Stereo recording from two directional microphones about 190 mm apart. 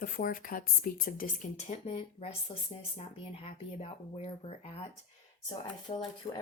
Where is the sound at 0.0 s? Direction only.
50° left (ahead or behind).